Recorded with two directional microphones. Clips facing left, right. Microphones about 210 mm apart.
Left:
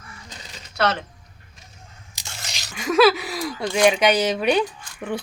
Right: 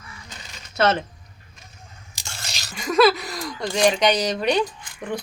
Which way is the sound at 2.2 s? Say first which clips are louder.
Even; 20° left (ahead or behind).